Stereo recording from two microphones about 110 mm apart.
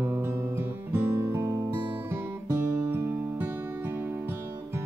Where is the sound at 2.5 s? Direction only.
25° right (ahead or behind).